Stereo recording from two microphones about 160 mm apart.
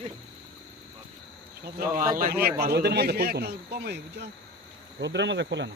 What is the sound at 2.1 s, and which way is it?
A man's voice, 65° right (ahead or behind).